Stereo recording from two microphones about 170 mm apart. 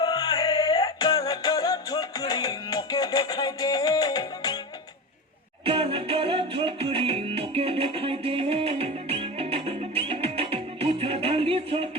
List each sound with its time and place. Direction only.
0.0 s music: 20° left (ahead or behind)
5.6 s music: 30° right (ahead or behind)